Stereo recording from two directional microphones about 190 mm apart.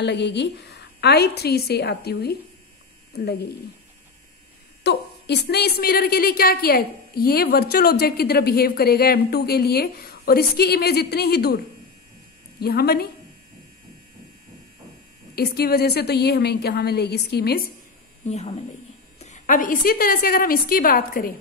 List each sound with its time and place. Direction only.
0.0 s a woman's voice: 65° left (ahead or behind)
4.8 s a woman's voice: 60° left (ahead or behind)
15.3 s a woman's voice: 55° left (ahead or behind)
18.2 s a woman's voice: 35° left (ahead or behind)